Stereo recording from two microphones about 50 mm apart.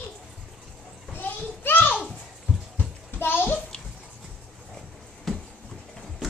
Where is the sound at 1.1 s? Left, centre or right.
Left.